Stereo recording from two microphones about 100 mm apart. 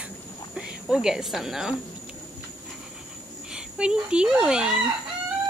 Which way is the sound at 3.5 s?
10° right (ahead or behind).